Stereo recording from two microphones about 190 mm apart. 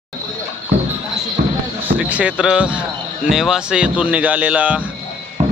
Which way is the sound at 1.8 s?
10° right (ahead or behind).